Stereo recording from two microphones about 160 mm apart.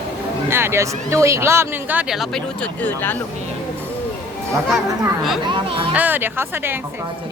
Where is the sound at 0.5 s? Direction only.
15° right (ahead or behind).